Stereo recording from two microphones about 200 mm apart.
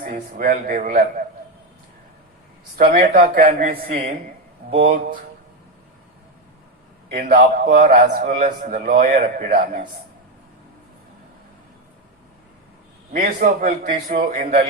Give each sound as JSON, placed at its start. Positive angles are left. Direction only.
{"t": 0.0, "sound": "a man's voice", "side_deg": -45}
{"t": 2.7, "sound": "a man's voice", "side_deg": -45}
{"t": 7.1, "sound": "a man's voice", "side_deg": -45}
{"t": 13.1, "sound": "a man's voice", "side_deg": -40}